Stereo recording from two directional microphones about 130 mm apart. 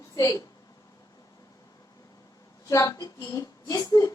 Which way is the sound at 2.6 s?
25° left (ahead or behind).